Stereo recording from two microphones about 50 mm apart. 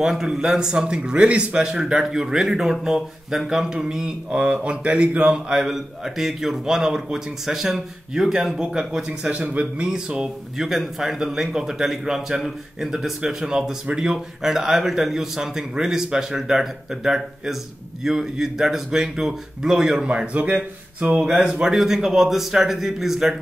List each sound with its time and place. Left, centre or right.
0.0 s a man's voice: centre
21.3 s speech: right
21.5 s a man's voice: centre